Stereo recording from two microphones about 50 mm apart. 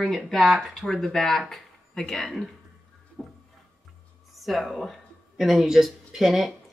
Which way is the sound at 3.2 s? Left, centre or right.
Centre.